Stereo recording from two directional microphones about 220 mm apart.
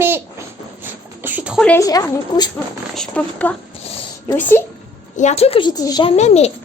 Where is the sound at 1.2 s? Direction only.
10° right (ahead or behind).